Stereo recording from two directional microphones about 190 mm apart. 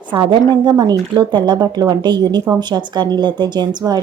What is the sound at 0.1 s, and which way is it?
Speech, 25° right (ahead or behind).